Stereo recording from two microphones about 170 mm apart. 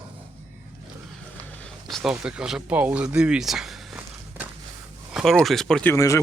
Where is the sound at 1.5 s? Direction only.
5° left (ahead or behind).